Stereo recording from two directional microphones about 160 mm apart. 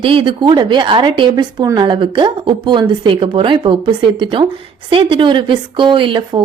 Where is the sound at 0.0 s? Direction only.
35° right (ahead or behind).